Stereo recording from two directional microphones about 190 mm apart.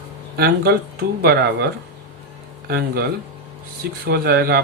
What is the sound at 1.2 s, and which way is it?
Speech, 60° right (ahead or behind).